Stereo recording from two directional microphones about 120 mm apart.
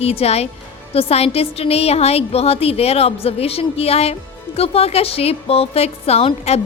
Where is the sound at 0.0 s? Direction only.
55° left (ahead or behind).